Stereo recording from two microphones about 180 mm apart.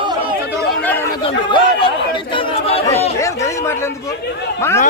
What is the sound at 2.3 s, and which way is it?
Chatter, 35° left (ahead or behind).